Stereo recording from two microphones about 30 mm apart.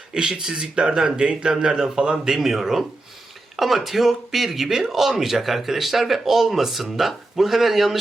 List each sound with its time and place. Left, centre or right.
0.1 s speech: right
2.2 s speech: centre